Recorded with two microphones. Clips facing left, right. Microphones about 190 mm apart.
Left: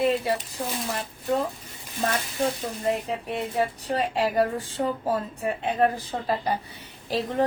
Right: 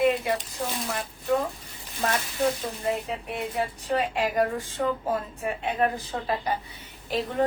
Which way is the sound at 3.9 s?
35° left (ahead or behind).